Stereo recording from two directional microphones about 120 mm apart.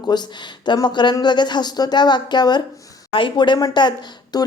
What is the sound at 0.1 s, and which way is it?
A woman's voice, 40° left (ahead or behind).